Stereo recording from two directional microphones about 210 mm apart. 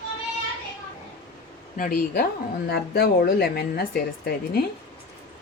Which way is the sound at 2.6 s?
50° left (ahead or behind).